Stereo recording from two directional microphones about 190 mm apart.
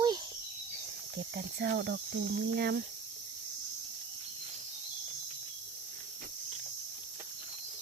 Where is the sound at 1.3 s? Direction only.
55° right (ahead or behind).